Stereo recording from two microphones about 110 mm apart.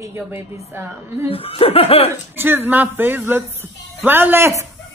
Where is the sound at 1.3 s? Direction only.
60° left (ahead or behind).